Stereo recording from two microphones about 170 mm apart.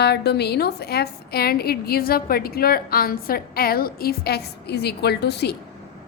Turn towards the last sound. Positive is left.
turn(degrees=75)  # may be behind; listen again after turning